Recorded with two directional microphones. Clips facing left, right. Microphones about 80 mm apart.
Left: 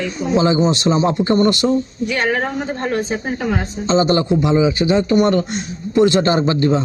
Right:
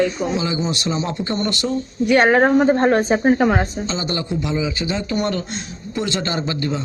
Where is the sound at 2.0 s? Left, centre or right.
Right.